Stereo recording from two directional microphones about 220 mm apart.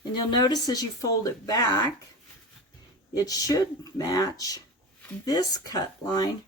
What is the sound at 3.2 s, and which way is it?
Speech, 15° left (ahead or behind).